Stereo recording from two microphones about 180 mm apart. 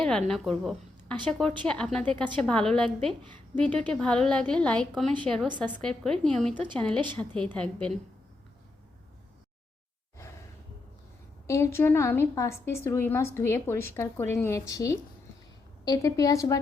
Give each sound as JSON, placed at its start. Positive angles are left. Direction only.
{"t": 0.0, "sound": "a woman's voice", "side_deg": 5}
{"t": 0.6, "sound": "a sound", "side_deg": 0}
{"t": 1.3, "sound": "a woman's voice", "side_deg": 5}
{"t": 11.4, "sound": "a woman's voice", "side_deg": 15}